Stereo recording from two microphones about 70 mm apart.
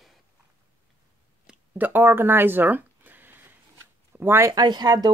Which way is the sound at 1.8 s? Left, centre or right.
Right.